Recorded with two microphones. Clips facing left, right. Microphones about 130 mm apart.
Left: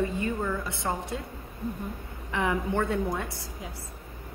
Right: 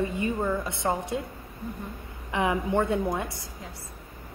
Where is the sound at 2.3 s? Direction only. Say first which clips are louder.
Right 2 dB; 20° right (ahead or behind).